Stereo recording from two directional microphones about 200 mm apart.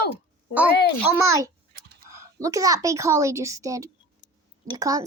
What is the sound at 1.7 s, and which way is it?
Whispering, 50° right (ahead or behind).